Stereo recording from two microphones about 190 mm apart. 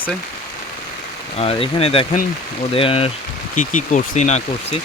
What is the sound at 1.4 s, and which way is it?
Speech, 30° left (ahead or behind).